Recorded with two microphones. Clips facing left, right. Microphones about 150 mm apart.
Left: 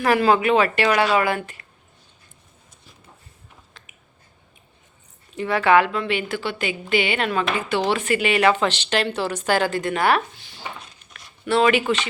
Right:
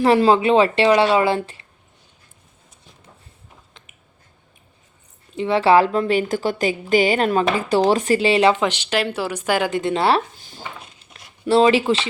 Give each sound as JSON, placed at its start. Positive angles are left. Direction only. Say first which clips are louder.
{"t": 0.0, "sound": "a woman's voice", "louder": "right 3 dB", "side_deg": -30}
{"t": 5.4, "sound": "a woman's voice", "louder": "right 3 dB", "side_deg": -25}
{"t": 8.6, "sound": "speech", "louder": "right 1 dB", "side_deg": -10}
{"t": 10.3, "sound": "a sound", "louder": "right 4 dB", "side_deg": -45}
{"t": 11.1, "sound": "speech", "louder": "right 4 dB", "side_deg": -30}